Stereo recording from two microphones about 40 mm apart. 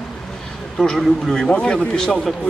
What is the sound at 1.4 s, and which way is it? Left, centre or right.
Speech, left.